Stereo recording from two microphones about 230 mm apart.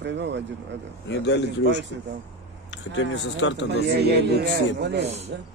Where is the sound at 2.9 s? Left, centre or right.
Left.